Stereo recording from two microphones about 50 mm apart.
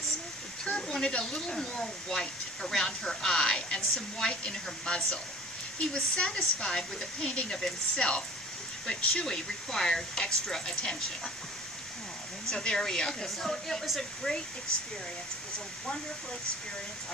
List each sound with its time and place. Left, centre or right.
0.6 s speech: centre
9.2 s speech: centre
12.5 s speech: centre
14.3 s speech: centre